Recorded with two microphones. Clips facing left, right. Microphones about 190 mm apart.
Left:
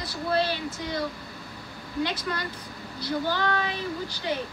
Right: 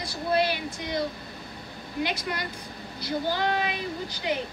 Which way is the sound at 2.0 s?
15° right (ahead or behind).